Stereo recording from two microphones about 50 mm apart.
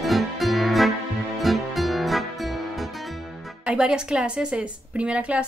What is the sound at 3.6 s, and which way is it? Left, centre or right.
A woman's voice, centre.